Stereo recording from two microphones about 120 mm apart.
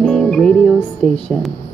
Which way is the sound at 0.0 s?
5° left (ahead or behind).